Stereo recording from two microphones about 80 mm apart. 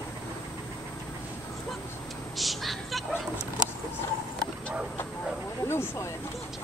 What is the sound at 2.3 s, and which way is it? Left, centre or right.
Speech, centre.